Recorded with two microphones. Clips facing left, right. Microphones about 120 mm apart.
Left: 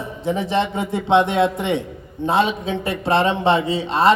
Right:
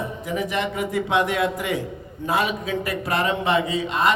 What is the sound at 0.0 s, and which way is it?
A man's voice, 30° left (ahead or behind).